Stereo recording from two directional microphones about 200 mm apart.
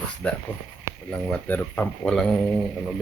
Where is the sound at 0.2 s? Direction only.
5° left (ahead or behind).